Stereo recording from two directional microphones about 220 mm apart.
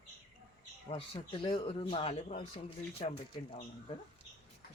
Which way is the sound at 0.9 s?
25° left (ahead or behind).